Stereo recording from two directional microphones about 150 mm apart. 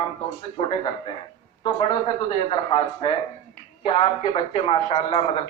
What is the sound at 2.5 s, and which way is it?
A man's voice, 35° left (ahead or behind).